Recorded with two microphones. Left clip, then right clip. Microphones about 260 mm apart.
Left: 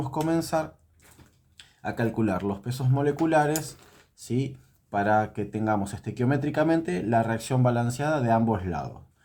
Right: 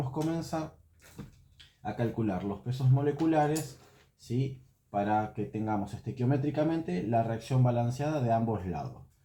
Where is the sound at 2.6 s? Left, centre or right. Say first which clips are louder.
Left 5 dB; left.